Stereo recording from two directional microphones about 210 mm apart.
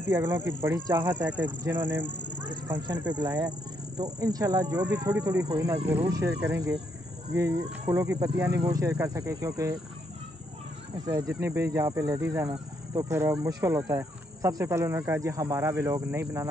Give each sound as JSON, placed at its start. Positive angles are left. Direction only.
{"t": 0.1, "sound": "speech", "side_deg": -10}
{"t": 6.3, "sound": "speech", "side_deg": -50}
{"t": 7.3, "sound": "speech", "side_deg": -15}
{"t": 11.1, "sound": "speech", "side_deg": -15}